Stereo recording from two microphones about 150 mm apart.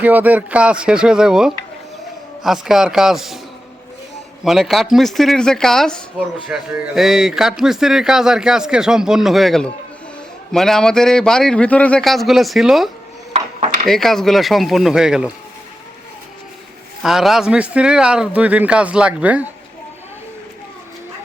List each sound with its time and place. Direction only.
0.0 s a man's voice: 10° right (ahead or behind)
4.4 s a man's voice: centre (ahead or behind)
17.0 s a man's voice: centre (ahead or behind)